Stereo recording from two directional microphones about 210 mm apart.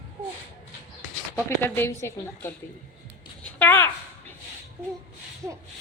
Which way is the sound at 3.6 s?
10° left (ahead or behind).